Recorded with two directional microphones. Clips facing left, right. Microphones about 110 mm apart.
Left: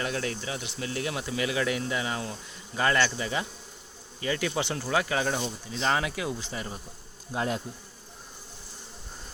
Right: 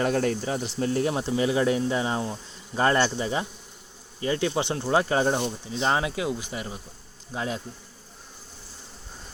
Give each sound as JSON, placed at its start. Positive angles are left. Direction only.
{"t": 0.0, "sound": "speech", "side_deg": -45}
{"t": 7.3, "sound": "bee", "side_deg": 0}